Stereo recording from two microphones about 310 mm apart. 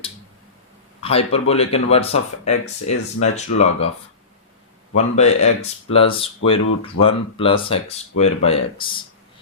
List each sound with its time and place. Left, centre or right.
1.1 s speech: centre
4.9 s speech: left